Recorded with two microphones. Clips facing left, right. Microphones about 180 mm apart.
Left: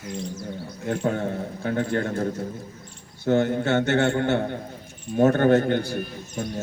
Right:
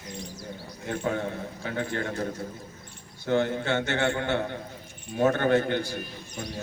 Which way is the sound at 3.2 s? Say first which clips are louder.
Left 4 dB; 45° left (ahead or behind).